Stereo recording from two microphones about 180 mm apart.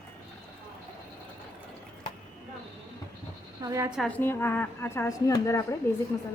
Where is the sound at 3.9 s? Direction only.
Centre (ahead or behind).